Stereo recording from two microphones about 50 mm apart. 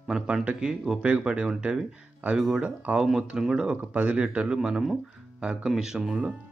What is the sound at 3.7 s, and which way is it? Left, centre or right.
Speech, right.